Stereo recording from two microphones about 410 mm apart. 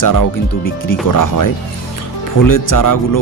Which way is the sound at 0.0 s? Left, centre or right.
Left.